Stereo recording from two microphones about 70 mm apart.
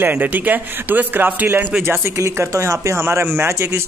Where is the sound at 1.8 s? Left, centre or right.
Right.